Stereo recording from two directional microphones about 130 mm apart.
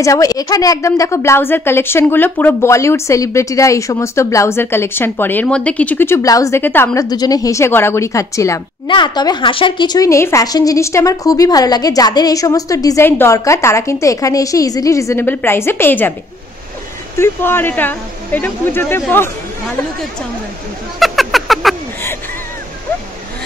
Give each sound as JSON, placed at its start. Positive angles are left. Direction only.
{"t": 0.0, "sound": "speech", "side_deg": 25}
{"t": 8.8, "sound": "speech", "side_deg": 35}
{"t": 17.2, "sound": "speech", "side_deg": 15}
{"t": 21.0, "sound": "speech", "side_deg": 0}